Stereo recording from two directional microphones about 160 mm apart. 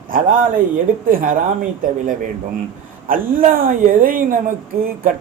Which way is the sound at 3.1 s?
60° right (ahead or behind).